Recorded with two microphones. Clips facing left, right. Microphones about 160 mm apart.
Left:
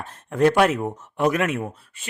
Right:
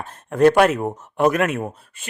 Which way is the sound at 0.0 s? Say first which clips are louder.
Right 4 dB; 45° right (ahead or behind).